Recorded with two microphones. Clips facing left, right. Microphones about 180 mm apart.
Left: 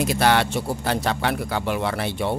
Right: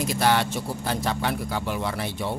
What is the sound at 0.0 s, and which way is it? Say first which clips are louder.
Speech: left 3 dB; 70° left (ahead or behind).